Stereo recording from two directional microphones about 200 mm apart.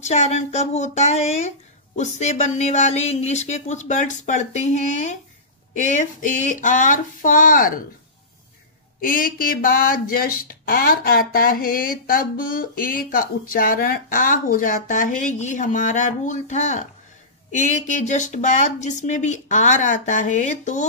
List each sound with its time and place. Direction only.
0.0 s speech: 35° left (ahead or behind)
9.0 s speech: 45° left (ahead or behind)